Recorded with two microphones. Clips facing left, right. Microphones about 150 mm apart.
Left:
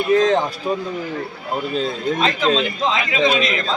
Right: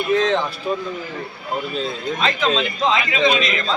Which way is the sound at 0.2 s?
40° left (ahead or behind).